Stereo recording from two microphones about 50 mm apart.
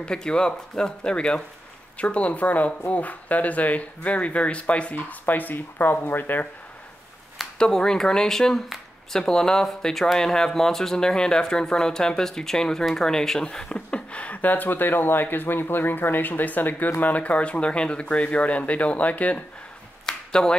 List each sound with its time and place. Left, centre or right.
0.0 s speech: centre
5.2 s speech: left
7.5 s speech: centre
8.6 s a sound: centre
9.2 s speech: centre; by 19.4 s left
20.1 s a sound: centre